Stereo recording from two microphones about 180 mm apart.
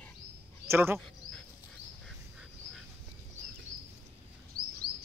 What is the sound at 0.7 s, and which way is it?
Speech, 15° right (ahead or behind).